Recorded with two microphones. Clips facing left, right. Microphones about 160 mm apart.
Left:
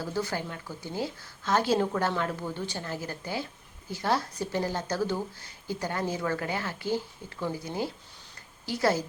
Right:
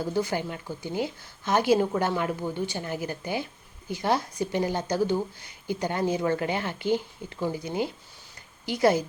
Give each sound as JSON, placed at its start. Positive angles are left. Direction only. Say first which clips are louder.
{"t": 0.0, "sound": "a woman's voice", "louder": "right 4 dB", "side_deg": -15}